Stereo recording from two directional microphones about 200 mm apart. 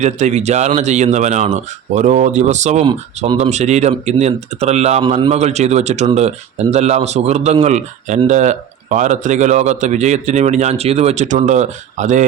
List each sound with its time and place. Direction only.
0.0 s speech: 35° right (ahead or behind)